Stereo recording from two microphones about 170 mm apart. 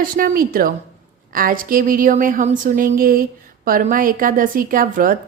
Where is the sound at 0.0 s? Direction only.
55° right (ahead or behind).